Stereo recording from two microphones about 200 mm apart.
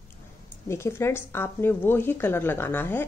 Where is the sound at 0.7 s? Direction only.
15° left (ahead or behind).